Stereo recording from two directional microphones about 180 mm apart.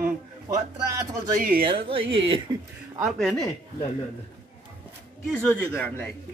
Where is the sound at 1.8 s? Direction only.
30° right (ahead or behind).